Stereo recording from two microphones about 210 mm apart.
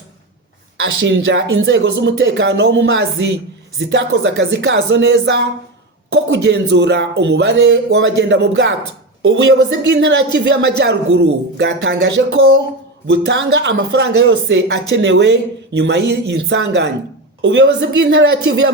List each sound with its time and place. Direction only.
0.8 s speech: 60° right (ahead or behind)